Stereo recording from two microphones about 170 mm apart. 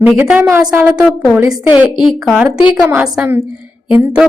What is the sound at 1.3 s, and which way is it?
Speech, 20° right (ahead or behind).